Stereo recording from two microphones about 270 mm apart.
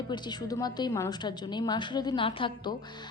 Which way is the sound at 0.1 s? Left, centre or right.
Centre.